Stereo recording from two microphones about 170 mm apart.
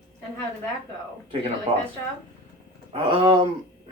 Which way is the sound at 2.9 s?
30° right (ahead or behind).